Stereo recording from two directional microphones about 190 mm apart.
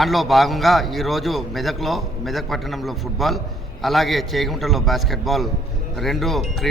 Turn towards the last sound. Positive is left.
turn(degrees=0)  # may be behind; listen again after turning